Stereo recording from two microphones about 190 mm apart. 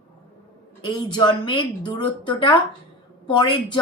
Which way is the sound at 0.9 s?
25° left (ahead or behind).